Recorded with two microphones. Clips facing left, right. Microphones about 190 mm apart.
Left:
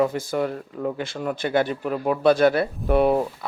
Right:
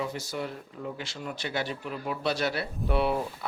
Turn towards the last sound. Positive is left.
turn(degrees=50)  # may be behind; listen again after turning